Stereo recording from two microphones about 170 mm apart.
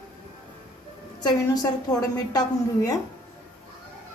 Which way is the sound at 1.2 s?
25° left (ahead or behind).